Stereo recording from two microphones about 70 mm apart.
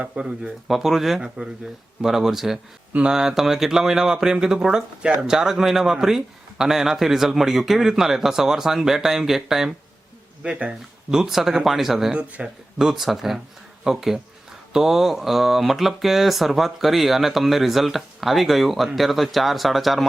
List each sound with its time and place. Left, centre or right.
0.0 s speech: centre
10.4 s speech: centre
12.1 s speech: centre
12.8 s speech: centre